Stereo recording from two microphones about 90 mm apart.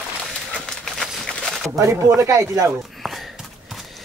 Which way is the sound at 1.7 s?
35° right (ahead or behind).